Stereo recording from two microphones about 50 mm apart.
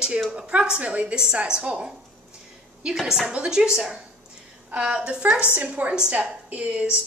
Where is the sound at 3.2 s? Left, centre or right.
Right.